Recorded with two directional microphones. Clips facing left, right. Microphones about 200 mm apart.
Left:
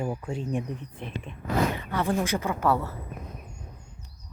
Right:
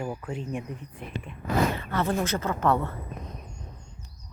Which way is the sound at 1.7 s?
15° left (ahead or behind).